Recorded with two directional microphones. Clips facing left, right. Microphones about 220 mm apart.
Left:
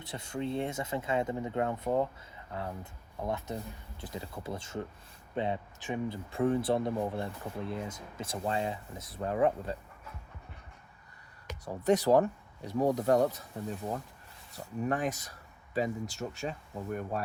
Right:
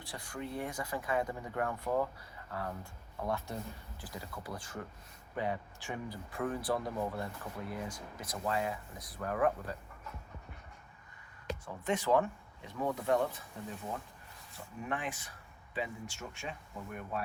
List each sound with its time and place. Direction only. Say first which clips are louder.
0.0 s speech: left 6 dB; 25° left (ahead or behind)
11.6 s speech: left 8 dB; 40° left (ahead or behind)
14.5 s speech: left 7 dB; 40° left (ahead or behind)